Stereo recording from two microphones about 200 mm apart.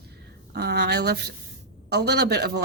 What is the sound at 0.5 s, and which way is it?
A woman's voice, 55° right (ahead or behind).